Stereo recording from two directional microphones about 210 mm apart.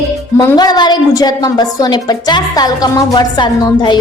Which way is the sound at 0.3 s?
20° left (ahead or behind).